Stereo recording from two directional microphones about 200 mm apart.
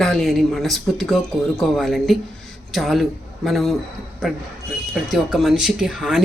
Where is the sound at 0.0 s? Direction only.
Centre (ahead or behind).